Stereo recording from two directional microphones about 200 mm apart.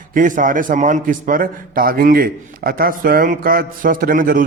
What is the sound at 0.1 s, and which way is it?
A man's voice, 40° right (ahead or behind).